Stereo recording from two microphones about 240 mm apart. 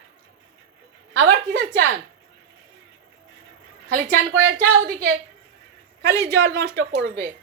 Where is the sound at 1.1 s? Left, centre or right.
Right.